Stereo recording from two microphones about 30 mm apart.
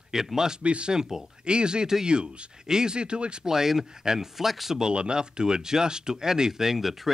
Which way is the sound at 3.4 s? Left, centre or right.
Centre.